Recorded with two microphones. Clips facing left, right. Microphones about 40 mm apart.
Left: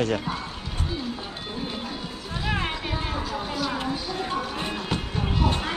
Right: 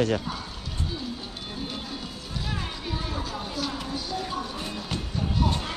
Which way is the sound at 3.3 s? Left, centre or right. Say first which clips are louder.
Left 3 dB; centre.